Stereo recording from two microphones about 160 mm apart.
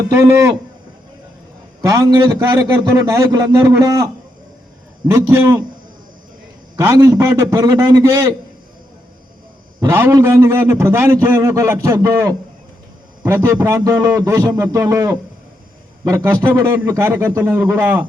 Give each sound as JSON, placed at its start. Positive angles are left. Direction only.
{"t": 1.8, "sound": "a man's voice", "side_deg": -20}
{"t": 5.1, "sound": "a man's voice", "side_deg": -20}
{"t": 6.7, "sound": "a man's voice", "side_deg": -20}
{"t": 9.8, "sound": "a man's voice", "side_deg": -15}